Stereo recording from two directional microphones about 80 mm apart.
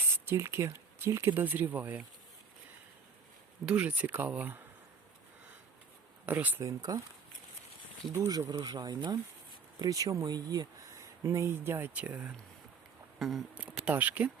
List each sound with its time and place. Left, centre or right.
0.3 s speech: right
3.7 s speech: centre
6.2 s speech: right
6.6 s speech: right
8.3 s speech: right
9.8 s speech: right
11.9 s speech: centre
13.1 s a sound: centre
13.6 s speech: centre